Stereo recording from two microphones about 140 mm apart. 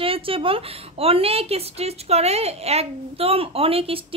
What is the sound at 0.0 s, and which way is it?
Speech, 40° right (ahead or behind).